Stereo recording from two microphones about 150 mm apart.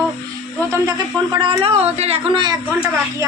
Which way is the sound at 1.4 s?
35° right (ahead or behind).